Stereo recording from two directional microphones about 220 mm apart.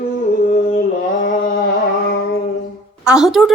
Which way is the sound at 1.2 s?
40° left (ahead or behind).